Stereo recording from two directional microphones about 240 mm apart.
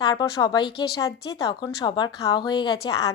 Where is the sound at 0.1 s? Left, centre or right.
Centre.